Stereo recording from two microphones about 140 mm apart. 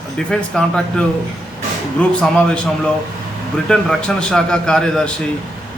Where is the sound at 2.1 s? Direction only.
5° left (ahead or behind).